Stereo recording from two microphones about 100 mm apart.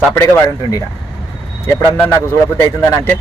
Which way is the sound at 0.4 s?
35° left (ahead or behind).